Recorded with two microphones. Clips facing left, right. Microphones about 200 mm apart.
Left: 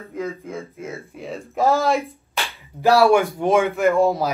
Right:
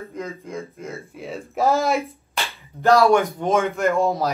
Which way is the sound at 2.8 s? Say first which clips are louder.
Left 1 dB; 10° left (ahead or behind).